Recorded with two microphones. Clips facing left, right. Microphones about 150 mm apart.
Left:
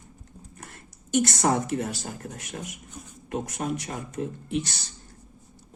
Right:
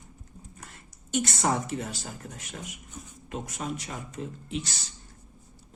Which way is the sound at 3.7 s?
60° left (ahead or behind).